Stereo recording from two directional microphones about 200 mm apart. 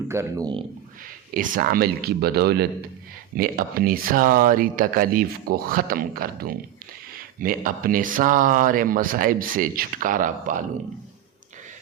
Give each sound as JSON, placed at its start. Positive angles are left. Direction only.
{"t": 0.1, "sound": "speech", "side_deg": -15}
{"t": 1.3, "sound": "speech", "side_deg": -45}